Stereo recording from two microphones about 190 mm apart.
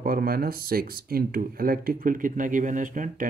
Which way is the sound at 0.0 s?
50° right (ahead or behind).